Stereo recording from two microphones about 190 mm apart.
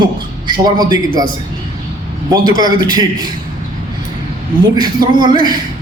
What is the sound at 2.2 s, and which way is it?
A man's voice, 20° right (ahead or behind).